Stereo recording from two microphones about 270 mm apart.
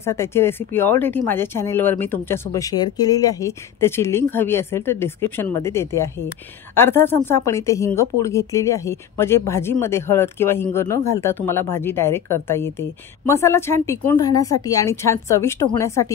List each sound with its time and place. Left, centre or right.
0.0 s speech: centre